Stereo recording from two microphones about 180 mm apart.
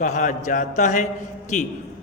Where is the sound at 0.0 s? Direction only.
45° left (ahead or behind).